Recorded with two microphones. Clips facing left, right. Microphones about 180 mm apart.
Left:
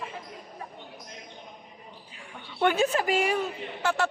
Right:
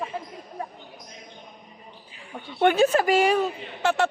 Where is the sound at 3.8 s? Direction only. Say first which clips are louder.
Right 4 dB; 25° right (ahead or behind).